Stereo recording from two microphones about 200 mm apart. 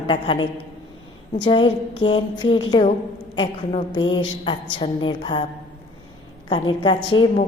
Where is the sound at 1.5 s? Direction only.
25° left (ahead or behind).